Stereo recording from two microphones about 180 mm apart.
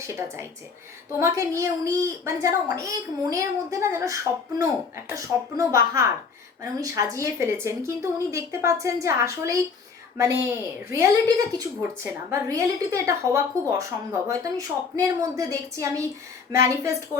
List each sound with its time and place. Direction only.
0.0 s a woman's voice: 15° right (ahead or behind)
10.9 s a woman's voice: 15° right (ahead or behind)